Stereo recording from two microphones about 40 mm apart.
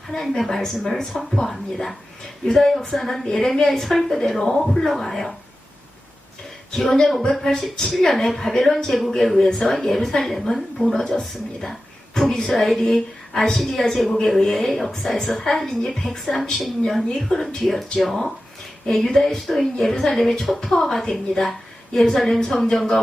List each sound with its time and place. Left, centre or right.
0.1 s a woman's voice: centre
6.7 s a woman's voice: centre
17.1 s a woman's voice: centre
17.6 s a woman's voice: centre